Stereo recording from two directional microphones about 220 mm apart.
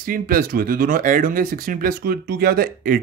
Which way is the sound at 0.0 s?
40° right (ahead or behind).